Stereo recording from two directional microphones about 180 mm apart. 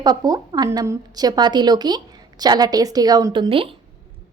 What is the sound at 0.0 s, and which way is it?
Speech, 20° right (ahead or behind).